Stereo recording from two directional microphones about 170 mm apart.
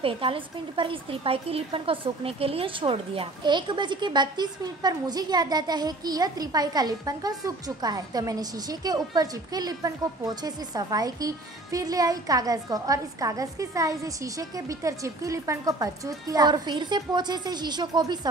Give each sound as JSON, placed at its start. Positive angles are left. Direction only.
{"t": 0.0, "sound": "a woman's voice", "side_deg": -30}